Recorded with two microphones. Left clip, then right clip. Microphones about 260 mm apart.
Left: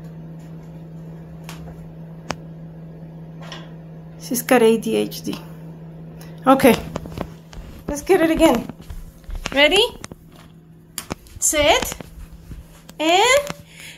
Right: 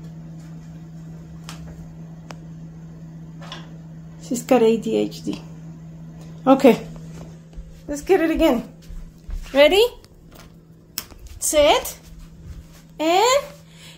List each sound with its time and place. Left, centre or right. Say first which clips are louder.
4.2 s a woman's voice: left 2 dB; centre
6.4 s speech: left 1 dB; centre
7.9 s a woman's voice: left 2 dB; centre
9.5 s a woman's voice: right 1 dB; right
11.3 s a sound: right 1 dB; centre
12.9 s a child's voice: left 2 dB; centre